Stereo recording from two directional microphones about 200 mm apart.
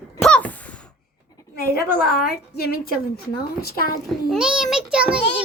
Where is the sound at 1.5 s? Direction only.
50° left (ahead or behind).